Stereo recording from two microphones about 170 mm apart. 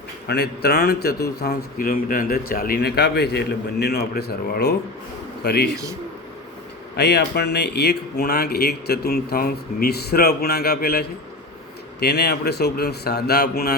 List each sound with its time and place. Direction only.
0.3 s a man's voice: 70° left (ahead or behind)
6.9 s speech: 80° left
11.9 s speech: 75° left (ahead or behind)